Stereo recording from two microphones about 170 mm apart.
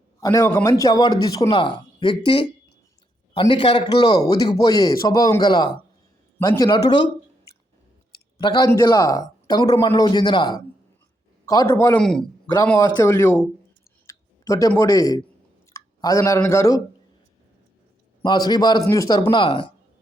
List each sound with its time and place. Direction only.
0.2 s a man's voice: 20° left (ahead or behind)
8.4 s a man's voice: 25° left (ahead or behind)
11.9 s a man's voice: 5° left (ahead or behind)
12.8 s speech: 15° left (ahead or behind)
14.1 s clicking: 20° left (ahead or behind)
14.8 s a man's voice: 20° left (ahead or behind)
18.2 s a man's voice: 25° left (ahead or behind)